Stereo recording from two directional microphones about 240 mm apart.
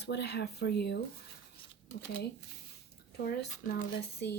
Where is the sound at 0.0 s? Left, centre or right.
Left.